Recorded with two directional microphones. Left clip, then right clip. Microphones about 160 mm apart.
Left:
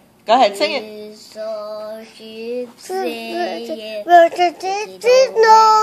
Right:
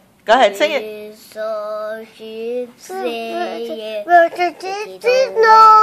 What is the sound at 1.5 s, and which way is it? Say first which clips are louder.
Female singing: right 4 dB; 35° right (ahead or behind).